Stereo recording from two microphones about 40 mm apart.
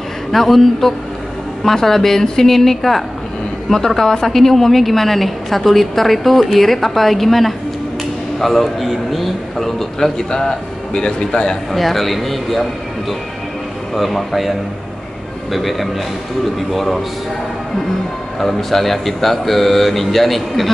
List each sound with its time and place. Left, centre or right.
0.3 s a woman's voice: centre
10.9 s speech: left
11.7 s a woman's voice: centre
13.9 s a woman's voice: centre
18.4 s a woman's voice: centre